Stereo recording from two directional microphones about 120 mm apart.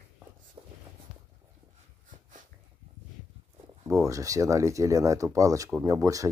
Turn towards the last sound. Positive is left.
turn(degrees=-30)  # may be behind; listen again after turning